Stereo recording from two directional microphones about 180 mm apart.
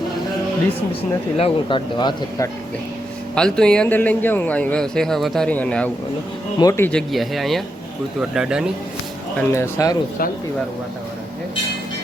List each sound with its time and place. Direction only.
1.4 s speech: 30° left (ahead or behind)
3.3 s a man's voice: 5° left (ahead or behind)
7.1 s a man's voice: centre (ahead or behind)
9.5 s speech: 15° left (ahead or behind)